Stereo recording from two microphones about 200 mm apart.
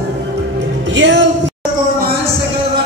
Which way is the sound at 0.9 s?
65° right (ahead or behind).